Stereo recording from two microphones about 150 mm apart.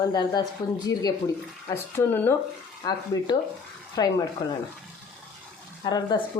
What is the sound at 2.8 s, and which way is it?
Speech, 30° left (ahead or behind).